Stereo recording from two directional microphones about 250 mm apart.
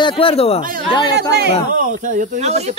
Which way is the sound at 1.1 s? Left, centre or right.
Right.